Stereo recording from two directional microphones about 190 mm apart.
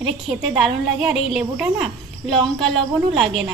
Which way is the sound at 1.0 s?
Centre (ahead or behind).